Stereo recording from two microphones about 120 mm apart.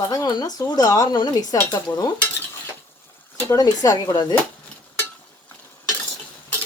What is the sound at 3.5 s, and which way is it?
Speech, 30° left (ahead or behind).